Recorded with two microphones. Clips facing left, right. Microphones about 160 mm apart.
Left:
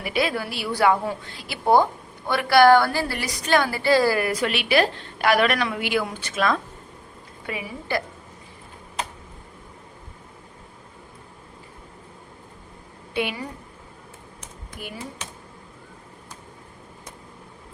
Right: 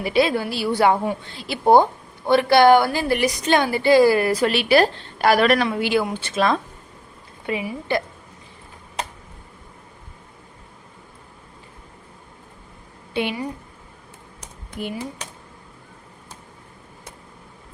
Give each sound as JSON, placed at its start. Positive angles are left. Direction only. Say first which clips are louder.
{"t": 0.0, "sound": "a woman's voice", "louder": "right 5 dB", "side_deg": -30}
{"t": 4.2, "sound": "a woman's voice", "louder": "right 5 dB", "side_deg": -35}
{"t": 13.2, "sound": "a woman's voice", "louder": "right 2 dB", "side_deg": -25}
{"t": 14.8, "sound": "a woman's voice", "louder": "right 8 dB", "side_deg": -25}